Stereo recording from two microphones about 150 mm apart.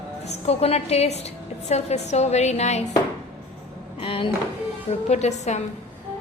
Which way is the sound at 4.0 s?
35° left (ahead or behind).